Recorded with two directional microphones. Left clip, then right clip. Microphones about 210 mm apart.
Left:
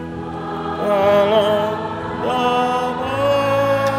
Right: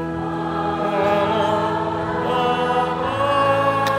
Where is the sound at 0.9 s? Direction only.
40° left (ahead or behind).